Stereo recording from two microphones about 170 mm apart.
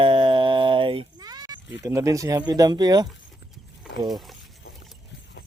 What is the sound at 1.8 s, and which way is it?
Speech, 20° right (ahead or behind).